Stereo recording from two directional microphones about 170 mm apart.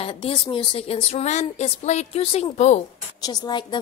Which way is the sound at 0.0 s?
35° left (ahead or behind).